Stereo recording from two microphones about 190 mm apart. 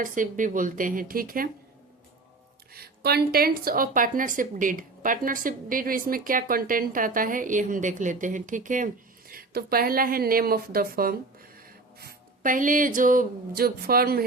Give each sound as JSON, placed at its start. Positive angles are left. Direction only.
{"t": 0.0, "sound": "speech", "side_deg": -45}
{"t": 2.7, "sound": "speech", "side_deg": -55}